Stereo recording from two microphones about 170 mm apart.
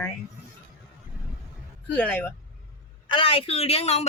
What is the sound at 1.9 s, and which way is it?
Speech, 10° left (ahead or behind).